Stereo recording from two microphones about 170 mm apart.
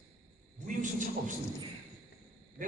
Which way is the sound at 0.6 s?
50° right (ahead or behind).